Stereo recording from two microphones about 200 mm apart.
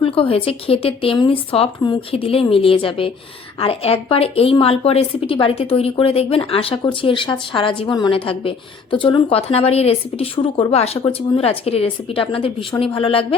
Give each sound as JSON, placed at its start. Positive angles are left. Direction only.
{"t": 0.0, "sound": "a woman's voice", "side_deg": 25}